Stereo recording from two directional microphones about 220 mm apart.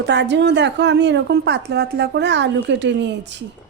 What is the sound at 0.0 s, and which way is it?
Speech, 50° right (ahead or behind).